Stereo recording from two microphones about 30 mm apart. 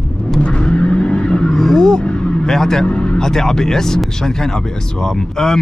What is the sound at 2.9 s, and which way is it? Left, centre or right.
Vehicle, left.